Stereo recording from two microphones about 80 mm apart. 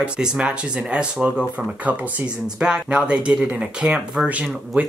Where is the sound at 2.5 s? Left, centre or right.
Centre.